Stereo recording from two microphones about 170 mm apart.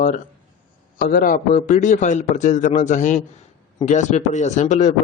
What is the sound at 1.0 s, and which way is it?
A man's voice, 55° left (ahead or behind).